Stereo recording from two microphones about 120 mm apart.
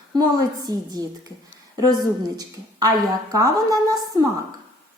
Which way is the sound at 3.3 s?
30° right (ahead or behind).